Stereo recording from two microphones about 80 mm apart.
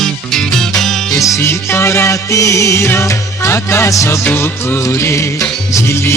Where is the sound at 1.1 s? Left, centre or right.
Left.